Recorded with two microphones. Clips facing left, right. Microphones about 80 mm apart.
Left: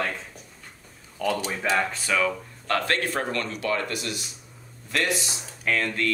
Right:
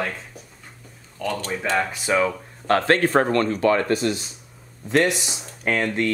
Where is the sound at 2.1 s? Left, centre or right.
Right.